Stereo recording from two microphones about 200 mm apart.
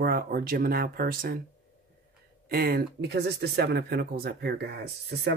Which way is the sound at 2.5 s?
50° right (ahead or behind).